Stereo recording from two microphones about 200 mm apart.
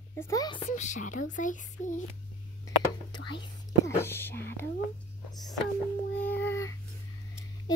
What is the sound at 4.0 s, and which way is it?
Speech, 10° left (ahead or behind).